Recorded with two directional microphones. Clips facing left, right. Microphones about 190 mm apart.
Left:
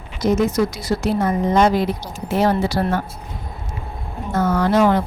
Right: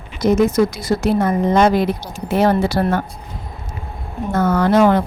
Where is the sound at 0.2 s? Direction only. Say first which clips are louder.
Right 3 dB; 55° right (ahead or behind).